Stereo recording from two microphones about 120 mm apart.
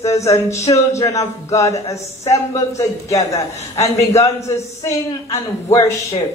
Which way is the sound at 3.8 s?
65° left (ahead or behind).